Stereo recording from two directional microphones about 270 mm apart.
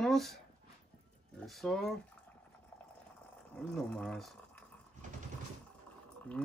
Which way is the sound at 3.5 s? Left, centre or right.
Centre.